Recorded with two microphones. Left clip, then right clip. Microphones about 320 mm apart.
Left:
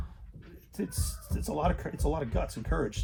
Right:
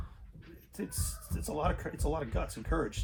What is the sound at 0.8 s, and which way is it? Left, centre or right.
Speech, left.